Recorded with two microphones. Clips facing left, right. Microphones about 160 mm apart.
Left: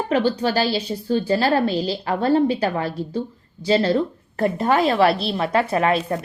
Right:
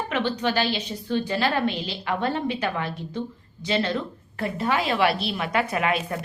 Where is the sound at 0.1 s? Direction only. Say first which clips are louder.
Left 6 dB; 35° left (ahead or behind).